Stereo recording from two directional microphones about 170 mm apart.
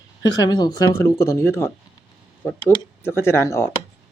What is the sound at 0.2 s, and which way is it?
Speech, 20° left (ahead or behind).